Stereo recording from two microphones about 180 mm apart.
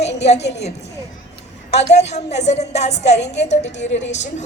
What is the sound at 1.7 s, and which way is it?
A woman's voice, 35° left (ahead or behind).